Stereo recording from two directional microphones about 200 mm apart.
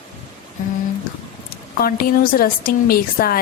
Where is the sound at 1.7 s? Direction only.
45° left (ahead or behind).